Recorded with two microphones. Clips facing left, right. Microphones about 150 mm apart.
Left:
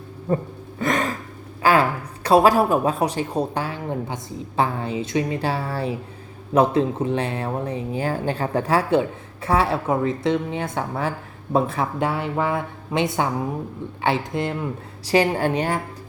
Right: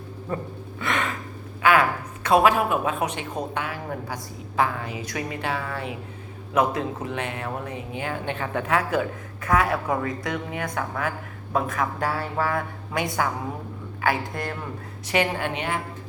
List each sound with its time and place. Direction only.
0.3 s speech: 35° left (ahead or behind)
0.8 s gasp: 40° left (ahead or behind)
1.6 s a woman's voice: 30° left (ahead or behind)